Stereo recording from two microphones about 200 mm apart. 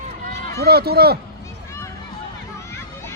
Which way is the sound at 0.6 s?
50° right (ahead or behind).